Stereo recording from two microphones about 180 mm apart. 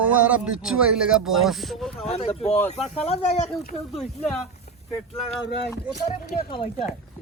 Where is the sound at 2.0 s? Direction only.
35° left (ahead or behind).